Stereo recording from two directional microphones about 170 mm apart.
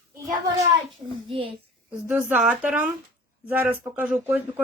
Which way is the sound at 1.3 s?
30° right (ahead or behind).